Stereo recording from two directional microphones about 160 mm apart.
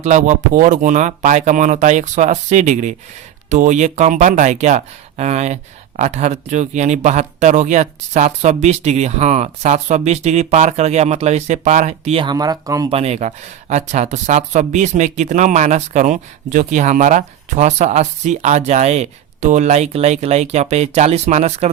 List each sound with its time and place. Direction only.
0.0 s speech: 50° right (ahead or behind); by 12.9 s 20° right (ahead or behind)
12.9 s speech: 40° right (ahead or behind)